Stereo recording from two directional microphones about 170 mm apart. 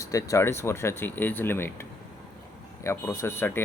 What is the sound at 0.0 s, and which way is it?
Speech, 20° left (ahead or behind).